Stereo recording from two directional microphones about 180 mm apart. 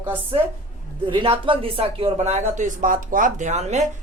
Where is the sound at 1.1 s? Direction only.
30° right (ahead or behind).